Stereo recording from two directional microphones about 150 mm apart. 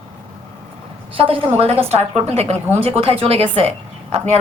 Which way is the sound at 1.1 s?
35° right (ahead or behind).